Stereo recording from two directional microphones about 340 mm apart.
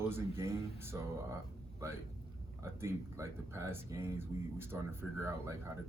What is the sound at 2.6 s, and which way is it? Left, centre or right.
Speech, centre.